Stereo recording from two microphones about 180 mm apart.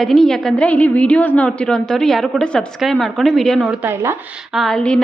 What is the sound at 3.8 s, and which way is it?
Speech, 10° right (ahead or behind).